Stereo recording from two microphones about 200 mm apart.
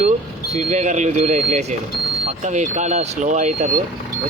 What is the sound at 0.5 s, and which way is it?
Speech, 35° right (ahead or behind).